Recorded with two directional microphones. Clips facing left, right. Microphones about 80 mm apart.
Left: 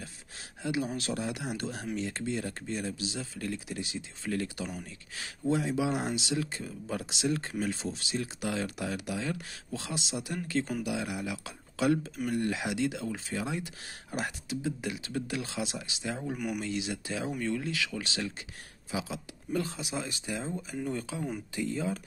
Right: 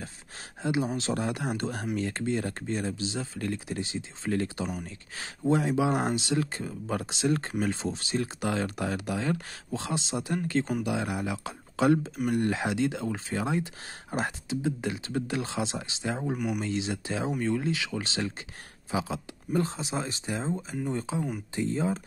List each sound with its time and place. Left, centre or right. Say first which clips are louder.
0.6 s speech: right 4 dB; right
1.1 s speech: right 4 dB; right